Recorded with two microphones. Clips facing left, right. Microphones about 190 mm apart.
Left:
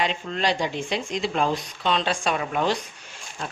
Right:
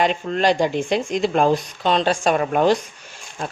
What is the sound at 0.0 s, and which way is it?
Speech, 50° right (ahead or behind).